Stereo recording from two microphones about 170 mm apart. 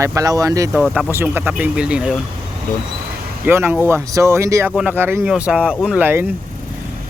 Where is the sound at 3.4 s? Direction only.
10° right (ahead or behind).